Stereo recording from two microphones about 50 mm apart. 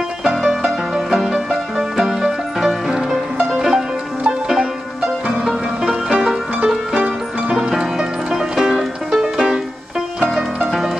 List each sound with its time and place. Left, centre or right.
0.2 s music: centre
6.0 s music: centre
7.7 s music: centre